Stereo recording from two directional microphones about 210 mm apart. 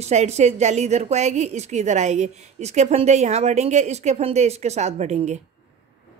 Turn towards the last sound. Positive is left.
turn(degrees=-30)  # may be behind; listen again after turning